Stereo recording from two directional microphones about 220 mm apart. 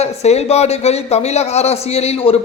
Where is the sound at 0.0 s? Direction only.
30° left (ahead or behind).